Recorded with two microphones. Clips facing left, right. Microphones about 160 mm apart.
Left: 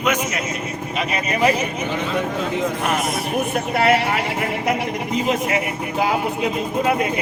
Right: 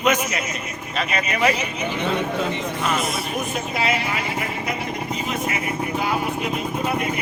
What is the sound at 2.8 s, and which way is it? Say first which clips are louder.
Speech: left 2 dB; 60° left (ahead or behind).